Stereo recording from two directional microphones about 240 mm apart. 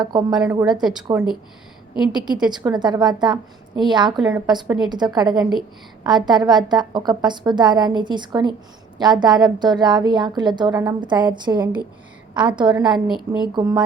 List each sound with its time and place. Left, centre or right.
0.0 s a woman's voice: centre
0.3 s a woman's voice: centre
2.7 s a woman's voice: centre
12.6 s a woman's voice: centre
13.5 s a woman's voice: centre